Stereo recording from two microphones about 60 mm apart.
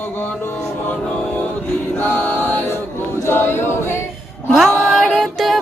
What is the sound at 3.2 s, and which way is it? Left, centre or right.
Choir, left.